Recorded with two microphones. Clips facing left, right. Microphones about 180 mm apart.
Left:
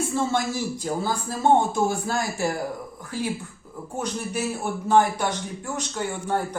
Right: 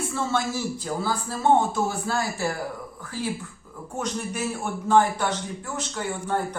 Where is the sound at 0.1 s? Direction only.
15° left (ahead or behind).